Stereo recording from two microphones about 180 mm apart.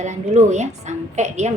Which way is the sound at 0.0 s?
40° right (ahead or behind).